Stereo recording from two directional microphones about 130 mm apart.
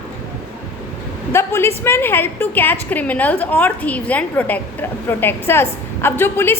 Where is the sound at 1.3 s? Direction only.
20° left (ahead or behind).